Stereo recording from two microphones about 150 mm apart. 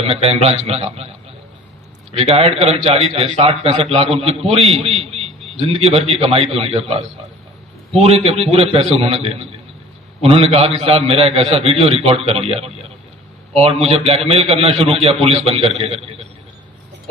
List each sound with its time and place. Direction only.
0.0 s a man's voice: 40° right (ahead or behind)
2.1 s a man's voice: 40° right (ahead or behind)
13.8 s a man's voice: 40° right (ahead or behind)